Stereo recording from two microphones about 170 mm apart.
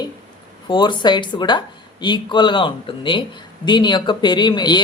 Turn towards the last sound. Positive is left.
turn(degrees=25)  # may be behind; listen again after turning